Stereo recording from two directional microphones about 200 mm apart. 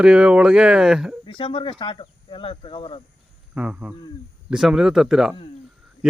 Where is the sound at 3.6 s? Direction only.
5° right (ahead or behind).